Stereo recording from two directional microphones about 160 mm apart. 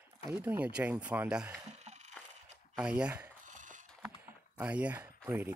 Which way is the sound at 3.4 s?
55° right (ahead or behind).